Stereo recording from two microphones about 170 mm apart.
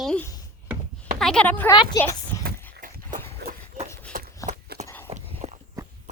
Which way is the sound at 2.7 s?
55° right (ahead or behind).